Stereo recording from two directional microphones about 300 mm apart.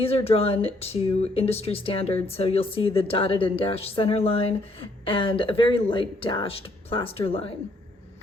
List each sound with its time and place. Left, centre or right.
0.0 s speech: centre